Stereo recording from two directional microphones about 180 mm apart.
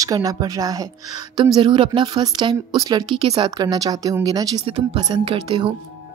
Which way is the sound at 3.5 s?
20° right (ahead or behind).